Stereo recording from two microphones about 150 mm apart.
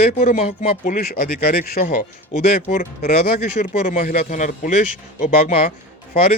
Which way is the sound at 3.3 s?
55° left (ahead or behind).